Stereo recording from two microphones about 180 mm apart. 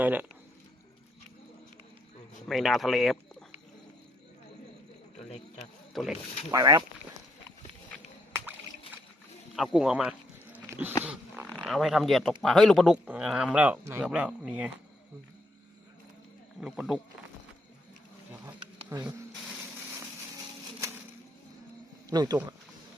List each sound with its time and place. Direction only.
0.0 s speech: 10° right (ahead or behind)
2.5 s speech: centre (ahead or behind)
5.9 s speech: centre (ahead or behind)
6.5 s speech: 20° right (ahead or behind)
9.6 s a sound: 5° right (ahead or behind)
11.0 s dog: 10° right (ahead or behind)
11.6 s speech: centre (ahead or behind)
16.6 s speech: 5° right (ahead or behind)
18.4 s a sound: 15° right (ahead or behind)
22.1 s speech: 20° right (ahead or behind)